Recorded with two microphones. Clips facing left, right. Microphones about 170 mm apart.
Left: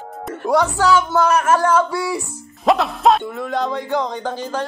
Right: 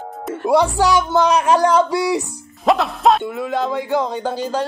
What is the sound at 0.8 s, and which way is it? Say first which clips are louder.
Speech: even; 15° right (ahead or behind).